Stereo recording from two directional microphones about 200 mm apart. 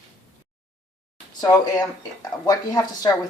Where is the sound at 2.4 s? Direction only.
20° left (ahead or behind).